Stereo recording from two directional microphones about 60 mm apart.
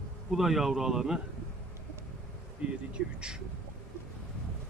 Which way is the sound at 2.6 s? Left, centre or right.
Right.